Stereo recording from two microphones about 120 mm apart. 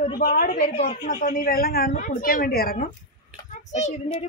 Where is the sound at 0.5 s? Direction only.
65° left (ahead or behind); by 1.4 s 90° left.